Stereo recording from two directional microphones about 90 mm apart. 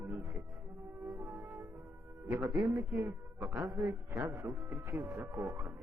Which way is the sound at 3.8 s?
35° right (ahead or behind).